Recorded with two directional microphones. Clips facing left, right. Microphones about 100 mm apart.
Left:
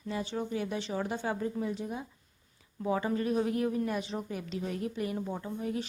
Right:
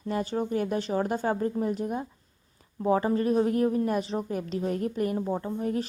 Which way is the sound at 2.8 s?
40° right (ahead or behind).